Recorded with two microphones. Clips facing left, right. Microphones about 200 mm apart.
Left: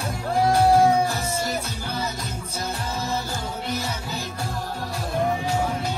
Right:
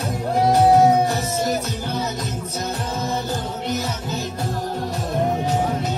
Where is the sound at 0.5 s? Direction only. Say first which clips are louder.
Right 3 dB; 20° right (ahead or behind).